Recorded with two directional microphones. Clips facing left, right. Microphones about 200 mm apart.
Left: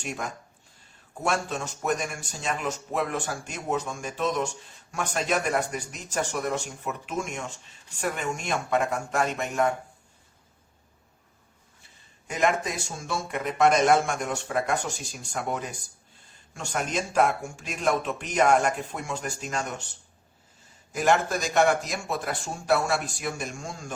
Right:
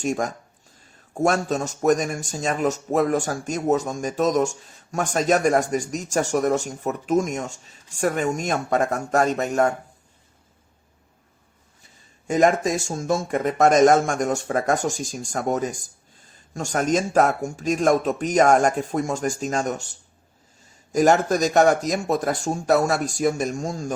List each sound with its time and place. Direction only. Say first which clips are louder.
0.0 s speech: right 9 dB; 45° right (ahead or behind)
12.3 s speech: right 7 dB; 45° right (ahead or behind)
16.7 s speech: right 6 dB; 45° right (ahead or behind)
20.9 s speech: right 6 dB; 40° right (ahead or behind)